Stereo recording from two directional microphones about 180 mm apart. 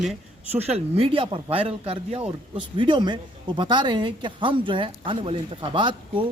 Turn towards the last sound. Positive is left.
turn(degrees=-25)  # may be behind; listen again after turning